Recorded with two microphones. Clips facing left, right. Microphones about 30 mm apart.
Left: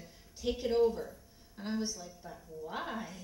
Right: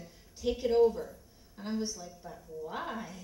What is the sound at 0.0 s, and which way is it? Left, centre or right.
A woman's voice, centre.